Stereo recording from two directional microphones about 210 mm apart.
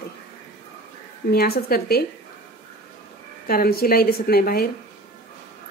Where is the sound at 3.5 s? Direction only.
45° left (ahead or behind).